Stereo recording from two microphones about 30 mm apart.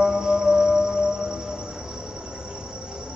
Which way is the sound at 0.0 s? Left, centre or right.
Right.